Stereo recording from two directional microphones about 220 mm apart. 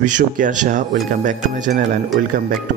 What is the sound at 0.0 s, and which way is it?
Speech, 35° right (ahead or behind).